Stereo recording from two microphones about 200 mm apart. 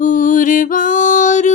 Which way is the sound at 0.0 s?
40° left (ahead or behind).